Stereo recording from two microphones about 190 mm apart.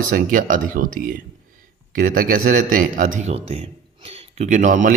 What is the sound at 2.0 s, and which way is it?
A man's voice, 45° right (ahead or behind).